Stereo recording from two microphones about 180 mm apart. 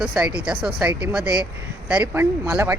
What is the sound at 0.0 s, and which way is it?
Speech, 5° right (ahead or behind).